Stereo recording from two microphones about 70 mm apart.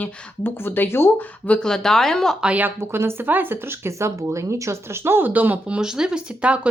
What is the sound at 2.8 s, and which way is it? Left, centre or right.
A woman's voice, right.